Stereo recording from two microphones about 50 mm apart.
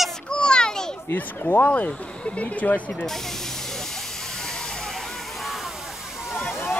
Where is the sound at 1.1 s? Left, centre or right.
Left.